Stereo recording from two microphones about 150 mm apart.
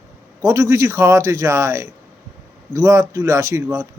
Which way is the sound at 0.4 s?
20° right (ahead or behind).